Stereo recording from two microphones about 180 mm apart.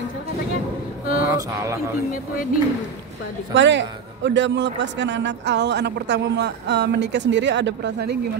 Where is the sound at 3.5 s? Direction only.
90° right.